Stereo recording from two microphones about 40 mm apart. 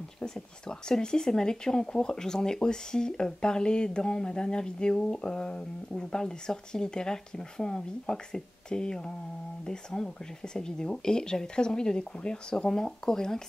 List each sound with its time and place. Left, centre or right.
0.2 s speech: centre